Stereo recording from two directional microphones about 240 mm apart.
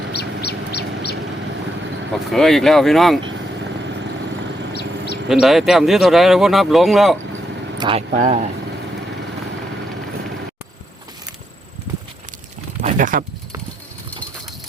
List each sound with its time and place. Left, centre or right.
0.1 s bird: left
2.3 s speech: centre
5.3 s speech: centre
7.8 s speech: right
8.1 s speech: right
12.8 s a sound: right